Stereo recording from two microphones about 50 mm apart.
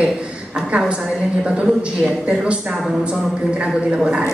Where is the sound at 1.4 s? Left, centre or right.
Right.